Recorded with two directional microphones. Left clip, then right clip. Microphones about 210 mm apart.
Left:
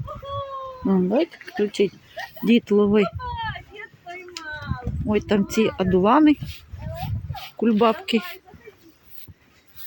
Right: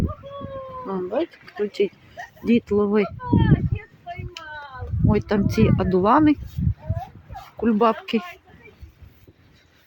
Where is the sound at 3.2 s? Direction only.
50° left (ahead or behind).